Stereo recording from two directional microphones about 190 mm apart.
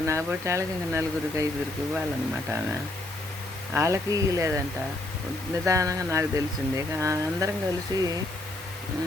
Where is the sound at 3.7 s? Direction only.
15° right (ahead or behind).